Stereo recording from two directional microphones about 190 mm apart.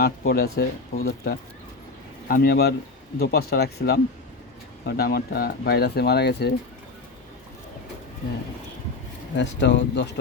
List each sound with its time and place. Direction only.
0.0 s speech: 55° left (ahead or behind)
9.3 s speech: 65° left (ahead or behind)